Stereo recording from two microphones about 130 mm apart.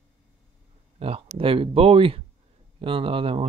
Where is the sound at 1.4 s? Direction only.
45° right (ahead or behind).